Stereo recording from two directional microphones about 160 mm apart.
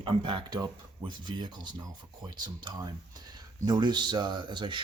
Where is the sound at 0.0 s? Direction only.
30° right (ahead or behind).